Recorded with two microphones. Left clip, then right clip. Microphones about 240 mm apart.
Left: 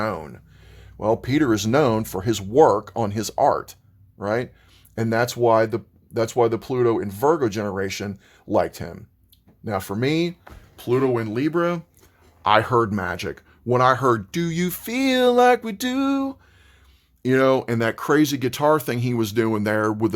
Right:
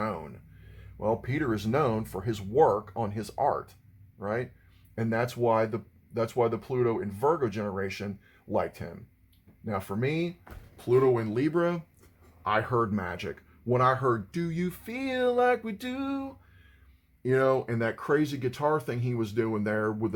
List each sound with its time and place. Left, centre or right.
0.0 s speech: left
10.4 s speech: left
12.4 s speech: left